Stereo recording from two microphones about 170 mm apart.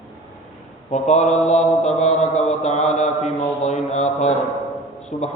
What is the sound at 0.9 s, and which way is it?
Mantra, 45° left (ahead or behind).